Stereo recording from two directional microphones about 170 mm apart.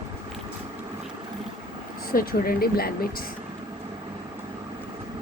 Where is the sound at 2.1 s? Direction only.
60° left (ahead or behind).